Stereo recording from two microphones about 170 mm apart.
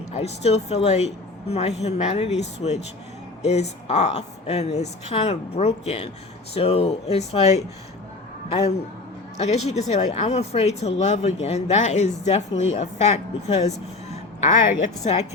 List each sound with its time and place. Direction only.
0.1 s a man's voice: 40° left (ahead or behind)
15.1 s speech: 35° left (ahead or behind)